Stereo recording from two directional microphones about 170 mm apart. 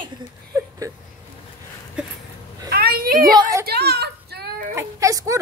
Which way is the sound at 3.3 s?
20° right (ahead or behind).